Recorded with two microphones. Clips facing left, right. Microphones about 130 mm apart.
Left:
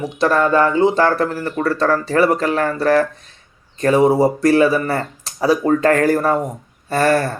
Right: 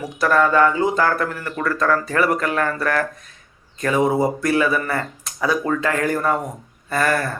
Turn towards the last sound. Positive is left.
turn(degrees=30)  # may be behind; listen again after turning